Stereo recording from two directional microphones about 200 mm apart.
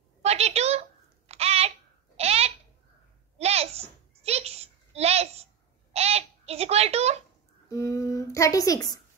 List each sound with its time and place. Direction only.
0.2 s a sound: 30° right (ahead or behind)
5.9 s babbling: 30° right (ahead or behind)
7.7 s speech: 15° left (ahead or behind)